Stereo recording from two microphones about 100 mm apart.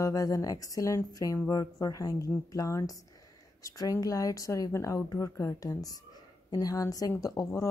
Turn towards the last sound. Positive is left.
turn(degrees=30)  # may be behind; listen again after turning